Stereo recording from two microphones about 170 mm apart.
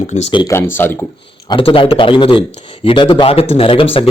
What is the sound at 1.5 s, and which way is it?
A man's voice, 30° left (ahead or behind).